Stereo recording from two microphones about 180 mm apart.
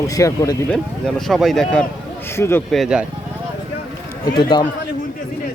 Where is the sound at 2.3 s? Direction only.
15° left (ahead or behind).